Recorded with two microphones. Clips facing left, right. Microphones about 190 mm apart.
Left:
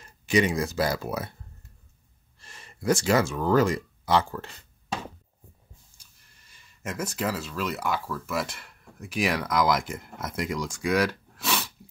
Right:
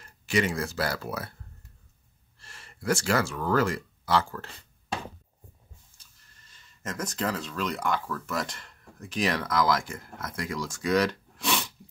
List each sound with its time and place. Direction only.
0.0 s speech: 15° left (ahead or behind)
2.4 s speech: 20° left (ahead or behind)
5.9 s speech: 10° left (ahead or behind)